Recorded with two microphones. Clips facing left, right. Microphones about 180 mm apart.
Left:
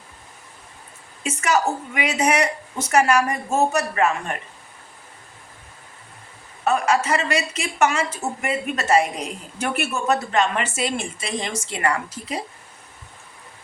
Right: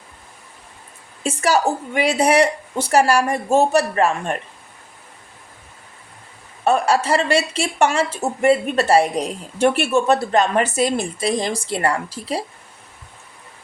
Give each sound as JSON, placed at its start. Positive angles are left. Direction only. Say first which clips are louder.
{"t": 1.2, "sound": "speech", "louder": "right 3 dB", "side_deg": -35}
{"t": 6.7, "sound": "speech", "louder": "right 3 dB", "side_deg": -30}